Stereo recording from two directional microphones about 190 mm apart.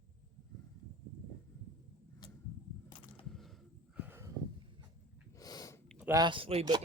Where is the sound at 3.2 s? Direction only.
Centre (ahead or behind).